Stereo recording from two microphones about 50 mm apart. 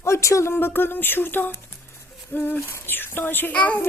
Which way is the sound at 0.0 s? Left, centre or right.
Left.